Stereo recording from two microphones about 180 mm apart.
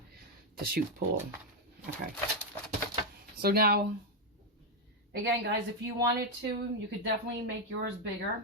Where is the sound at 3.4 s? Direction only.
60° right (ahead or behind).